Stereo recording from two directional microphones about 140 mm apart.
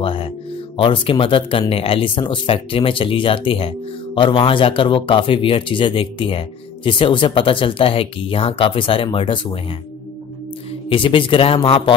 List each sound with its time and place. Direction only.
0.0 s music: 40° left (ahead or behind)
0.7 s speech: 40° left (ahead or behind)
10.9 s speech: 40° left (ahead or behind)